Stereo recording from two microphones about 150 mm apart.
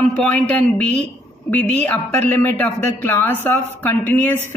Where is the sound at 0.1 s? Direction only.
10° left (ahead or behind).